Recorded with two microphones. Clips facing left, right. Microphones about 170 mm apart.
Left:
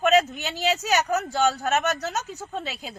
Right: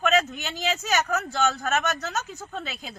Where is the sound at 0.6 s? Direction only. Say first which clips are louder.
Left 3 dB; 35° left (ahead or behind).